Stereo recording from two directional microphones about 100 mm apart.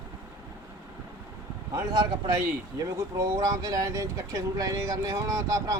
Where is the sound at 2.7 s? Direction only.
35° right (ahead or behind).